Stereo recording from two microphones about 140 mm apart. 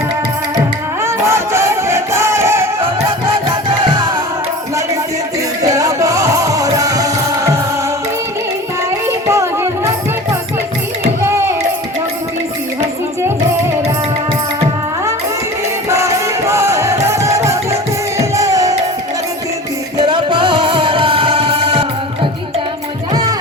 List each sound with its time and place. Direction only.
1.0 s music: 20° right (ahead or behind)
5.6 s music: 25° right (ahead or behind)
9.0 s music: 20° right (ahead or behind)
15.9 s music: 20° right (ahead or behind)
20.1 s music: 35° right (ahead or behind)